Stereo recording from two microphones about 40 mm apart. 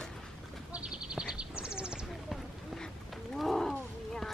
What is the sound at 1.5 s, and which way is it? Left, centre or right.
Bird, right.